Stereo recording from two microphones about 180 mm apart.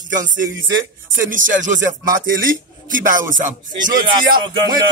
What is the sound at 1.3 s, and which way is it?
Speech, 45° right (ahead or behind).